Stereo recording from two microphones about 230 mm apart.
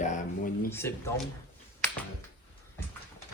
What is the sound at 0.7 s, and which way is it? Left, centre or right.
Speech, centre.